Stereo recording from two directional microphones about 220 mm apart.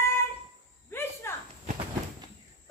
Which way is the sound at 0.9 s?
10° left (ahead or behind).